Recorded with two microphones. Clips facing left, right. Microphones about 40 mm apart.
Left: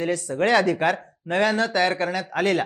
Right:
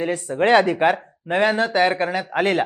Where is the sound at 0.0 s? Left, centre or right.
Right.